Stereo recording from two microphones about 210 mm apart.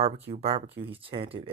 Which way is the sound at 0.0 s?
30° right (ahead or behind).